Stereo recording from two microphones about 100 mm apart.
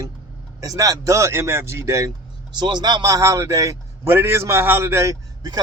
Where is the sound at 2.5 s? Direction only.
50° right (ahead or behind); by 5.1 s 25° right (ahead or behind).